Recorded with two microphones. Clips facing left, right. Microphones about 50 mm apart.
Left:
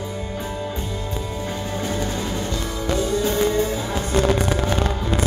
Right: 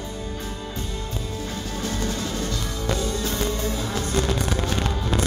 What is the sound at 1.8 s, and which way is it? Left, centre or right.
Music, centre.